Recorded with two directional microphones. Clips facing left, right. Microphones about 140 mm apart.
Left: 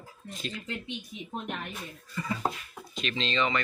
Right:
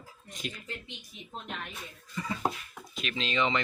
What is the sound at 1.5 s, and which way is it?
Speech, 55° left (ahead or behind).